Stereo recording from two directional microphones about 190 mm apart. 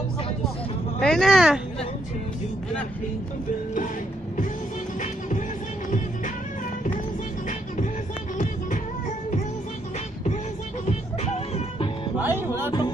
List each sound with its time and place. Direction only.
1.0 s speech: centre (ahead or behind)
5.9 s music: 40° left (ahead or behind)
7.4 s music: 40° left (ahead or behind)
10.9 s music: 35° left (ahead or behind)
12.2 s music: 10° right (ahead or behind)